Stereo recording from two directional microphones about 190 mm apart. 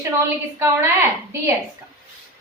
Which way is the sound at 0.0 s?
15° right (ahead or behind).